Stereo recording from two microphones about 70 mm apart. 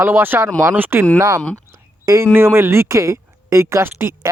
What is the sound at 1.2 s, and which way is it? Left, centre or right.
Speech, right.